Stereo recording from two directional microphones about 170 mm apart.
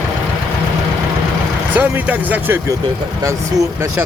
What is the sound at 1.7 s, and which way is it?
Speech, 10° right (ahead or behind).